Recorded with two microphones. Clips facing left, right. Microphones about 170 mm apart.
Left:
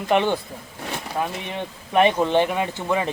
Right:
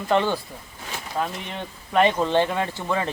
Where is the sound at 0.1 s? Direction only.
15° left (ahead or behind).